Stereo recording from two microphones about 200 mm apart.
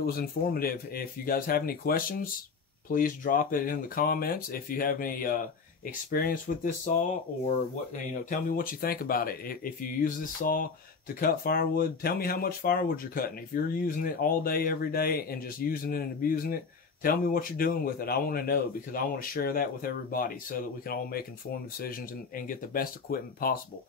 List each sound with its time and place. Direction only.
0.0 s speech: 50° left (ahead or behind)
8.0 s speech: 40° left (ahead or behind)